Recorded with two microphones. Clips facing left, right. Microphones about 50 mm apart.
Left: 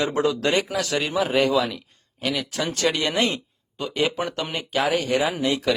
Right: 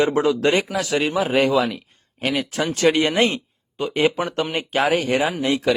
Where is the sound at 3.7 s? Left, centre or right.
Right.